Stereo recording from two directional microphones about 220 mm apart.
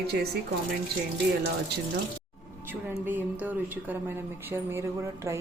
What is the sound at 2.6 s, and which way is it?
Speech, 10° right (ahead or behind).